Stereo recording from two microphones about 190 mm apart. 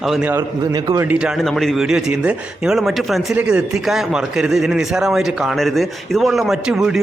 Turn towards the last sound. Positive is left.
turn(degrees=-5)  # may be behind; listen again after turning